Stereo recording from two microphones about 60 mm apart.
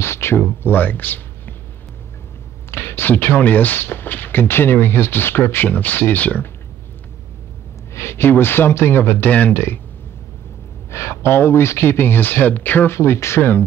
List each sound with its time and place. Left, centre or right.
0.0 s speech: left
2.7 s a sound: left
3.1 s speech: left
7.9 s speech: left
10.9 s speech: left
12.9 s speech: left